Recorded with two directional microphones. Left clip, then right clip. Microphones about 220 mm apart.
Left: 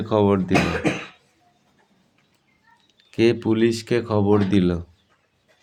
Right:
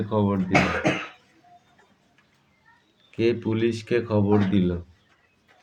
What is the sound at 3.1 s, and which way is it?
Speech, 40° left (ahead or behind).